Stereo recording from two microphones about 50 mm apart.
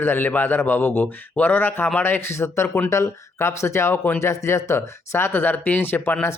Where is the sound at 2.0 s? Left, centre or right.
Left.